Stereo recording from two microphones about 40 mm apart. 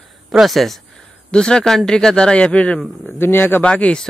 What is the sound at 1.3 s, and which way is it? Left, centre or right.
Speech, left.